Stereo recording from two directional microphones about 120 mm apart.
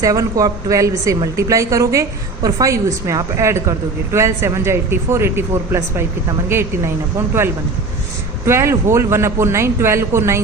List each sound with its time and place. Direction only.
0.0 s a woman's voice: 30° right (ahead or behind)
8.4 s a woman's voice: 20° right (ahead or behind)